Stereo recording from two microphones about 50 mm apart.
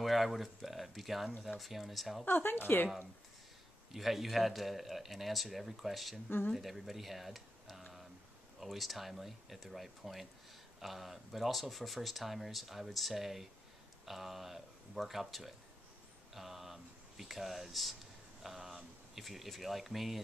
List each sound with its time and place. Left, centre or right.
0.0 s speech: centre
2.2 s speech: left
3.9 s speech: centre